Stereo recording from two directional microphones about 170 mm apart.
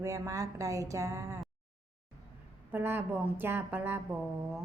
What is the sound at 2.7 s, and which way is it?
A woman's voice, 15° right (ahead or behind).